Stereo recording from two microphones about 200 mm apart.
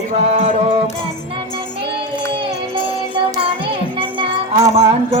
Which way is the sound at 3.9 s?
25° right (ahead or behind).